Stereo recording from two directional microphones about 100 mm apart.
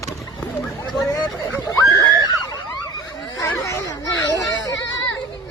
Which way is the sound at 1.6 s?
35° left (ahead or behind).